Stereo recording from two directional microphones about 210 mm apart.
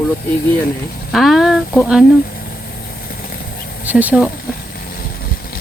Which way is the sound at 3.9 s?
5° right (ahead or behind).